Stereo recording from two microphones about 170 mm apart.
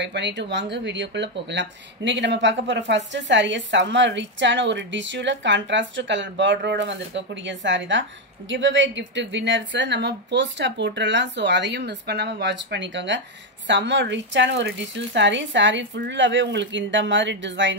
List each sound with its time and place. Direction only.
0.0 s speech: 90° right